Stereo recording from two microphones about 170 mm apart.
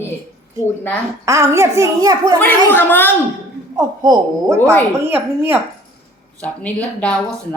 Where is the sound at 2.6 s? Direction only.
10° left (ahead or behind).